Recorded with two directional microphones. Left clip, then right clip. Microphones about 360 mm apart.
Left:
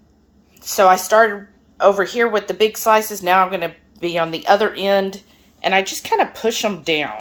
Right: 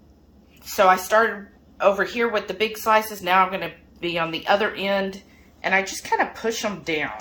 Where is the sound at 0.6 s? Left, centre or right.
Centre.